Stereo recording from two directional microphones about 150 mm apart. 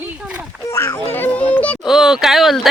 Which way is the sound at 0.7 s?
20° left (ahead or behind).